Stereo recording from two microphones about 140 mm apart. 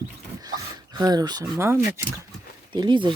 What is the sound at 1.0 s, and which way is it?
Speech, 30° right (ahead or behind).